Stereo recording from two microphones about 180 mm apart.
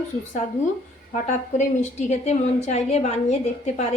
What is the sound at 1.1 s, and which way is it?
A woman's voice, 40° left (ahead or behind).